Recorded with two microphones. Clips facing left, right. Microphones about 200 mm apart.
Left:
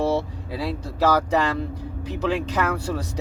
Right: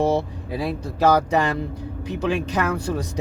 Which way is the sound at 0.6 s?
15° right (ahead or behind).